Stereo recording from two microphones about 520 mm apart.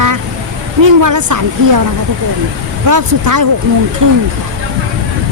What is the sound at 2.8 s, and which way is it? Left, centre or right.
Speech, right.